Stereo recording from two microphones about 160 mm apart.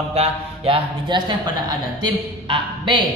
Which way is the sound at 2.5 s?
30° right (ahead or behind).